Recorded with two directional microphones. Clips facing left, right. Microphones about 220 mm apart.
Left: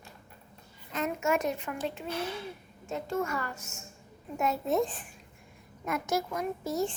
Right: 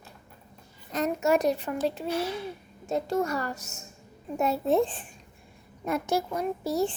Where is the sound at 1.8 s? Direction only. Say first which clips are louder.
Right 6 dB; 35° right (ahead or behind).